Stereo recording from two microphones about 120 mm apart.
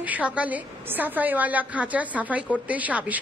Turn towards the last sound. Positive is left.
turn(degrees=-15)  # may be behind; listen again after turning